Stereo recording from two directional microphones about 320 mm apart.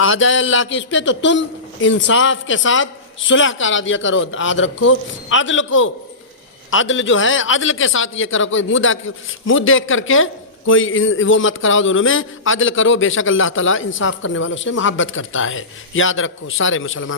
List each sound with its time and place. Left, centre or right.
0.0 s a man's voice: left